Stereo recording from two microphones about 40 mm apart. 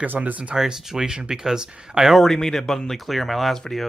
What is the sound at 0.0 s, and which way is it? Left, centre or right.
Speech, right.